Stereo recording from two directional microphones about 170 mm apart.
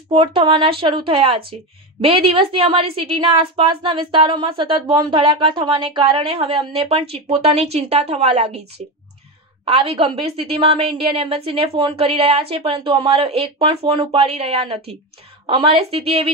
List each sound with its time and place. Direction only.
0.1 s a woman's voice: 30° right (ahead or behind)
9.7 s a woman's voice: 35° right (ahead or behind)